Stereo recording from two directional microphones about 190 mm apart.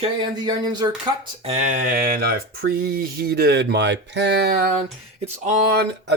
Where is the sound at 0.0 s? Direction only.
20° right (ahead or behind).